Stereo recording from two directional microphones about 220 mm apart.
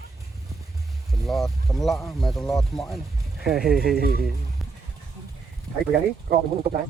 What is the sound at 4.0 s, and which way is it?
Speech, 45° right (ahead or behind).